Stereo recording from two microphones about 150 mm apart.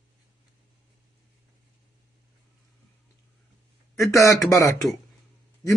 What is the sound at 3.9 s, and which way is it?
Speech, 20° left (ahead or behind).